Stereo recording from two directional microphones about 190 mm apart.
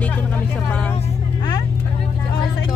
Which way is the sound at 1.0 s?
25° left (ahead or behind).